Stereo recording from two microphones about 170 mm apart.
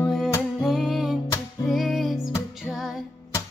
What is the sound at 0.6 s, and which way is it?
Music, centre (ahead or behind).